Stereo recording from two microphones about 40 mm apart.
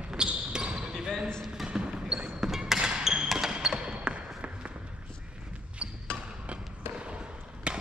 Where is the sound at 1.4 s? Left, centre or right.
Centre.